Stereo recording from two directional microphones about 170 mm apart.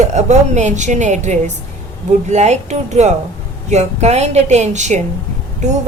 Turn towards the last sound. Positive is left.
turn(degrees=-40)  # may be behind; listen again after turning